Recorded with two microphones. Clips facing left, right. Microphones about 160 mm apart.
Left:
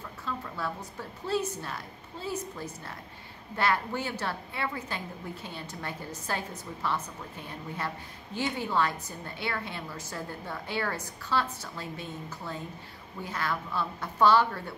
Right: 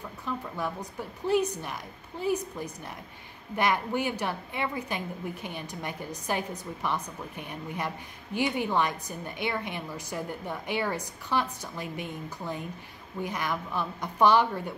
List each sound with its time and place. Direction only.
0.2 s a woman's voice: 15° right (ahead or behind)